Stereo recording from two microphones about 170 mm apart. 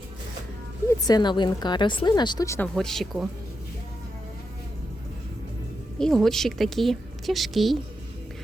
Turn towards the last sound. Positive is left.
turn(degrees=0)  # may be behind; listen again after turning